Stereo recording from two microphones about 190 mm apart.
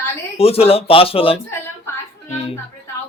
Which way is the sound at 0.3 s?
30° left (ahead or behind).